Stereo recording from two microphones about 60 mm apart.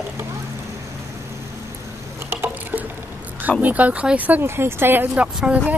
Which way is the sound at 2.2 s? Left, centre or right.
Right.